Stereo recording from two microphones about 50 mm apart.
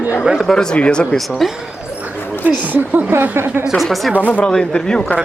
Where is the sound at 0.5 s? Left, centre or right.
Centre.